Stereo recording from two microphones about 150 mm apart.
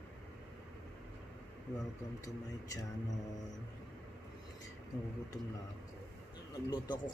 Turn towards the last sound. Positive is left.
turn(degrees=30)  # may be behind; listen again after turning